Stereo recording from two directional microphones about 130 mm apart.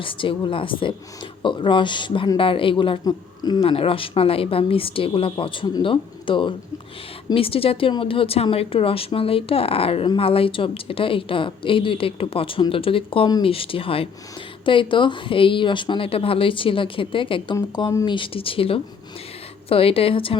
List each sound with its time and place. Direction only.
0.0 s speech: 40° left (ahead or behind)
3.6 s speech: 45° left (ahead or behind)